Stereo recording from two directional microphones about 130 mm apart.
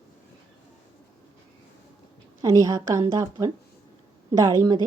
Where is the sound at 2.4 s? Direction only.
25° right (ahead or behind).